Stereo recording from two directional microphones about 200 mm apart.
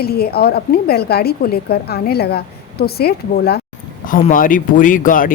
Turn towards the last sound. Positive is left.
turn(degrees=40)  # may be behind; listen again after turning